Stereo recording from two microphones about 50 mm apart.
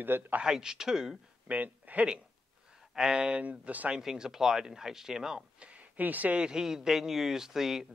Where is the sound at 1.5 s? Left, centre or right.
Right.